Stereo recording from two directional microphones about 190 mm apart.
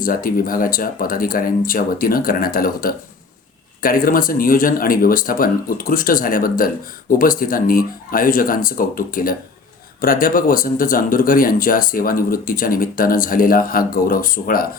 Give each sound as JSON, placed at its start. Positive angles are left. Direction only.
{"t": 0.0, "sound": "speech", "side_deg": 50}